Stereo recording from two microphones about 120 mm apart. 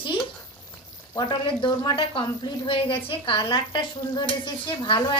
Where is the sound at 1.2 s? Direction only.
40° left (ahead or behind).